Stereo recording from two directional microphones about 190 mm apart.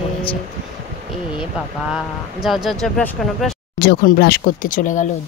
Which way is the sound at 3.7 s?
55° left (ahead or behind).